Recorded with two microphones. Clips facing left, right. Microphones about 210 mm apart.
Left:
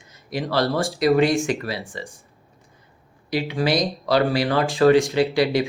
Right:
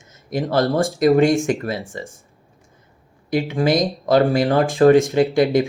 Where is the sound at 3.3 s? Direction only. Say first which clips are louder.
Right 3 dB; 50° right (ahead or behind).